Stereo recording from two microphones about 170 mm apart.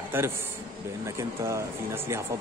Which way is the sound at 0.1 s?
10° right (ahead or behind).